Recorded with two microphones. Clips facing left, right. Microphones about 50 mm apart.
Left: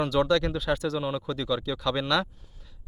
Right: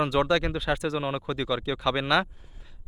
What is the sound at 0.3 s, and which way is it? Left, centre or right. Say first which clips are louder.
Speech: even; centre.